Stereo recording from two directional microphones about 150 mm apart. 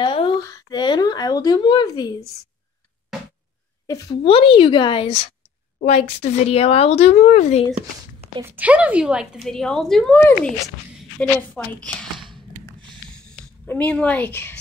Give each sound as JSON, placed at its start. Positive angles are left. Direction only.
{"t": 0.0, "sound": "a sound", "side_deg": 35}
{"t": 0.4, "sound": "a sound", "side_deg": 20}
{"t": 3.8, "sound": "a woman's voice", "side_deg": 25}
{"t": 4.2, "sound": "a woman's voice", "side_deg": 35}
{"t": 8.4, "sound": "a woman's voice", "side_deg": -10}
{"t": 13.7, "sound": "a woman's voice", "side_deg": 10}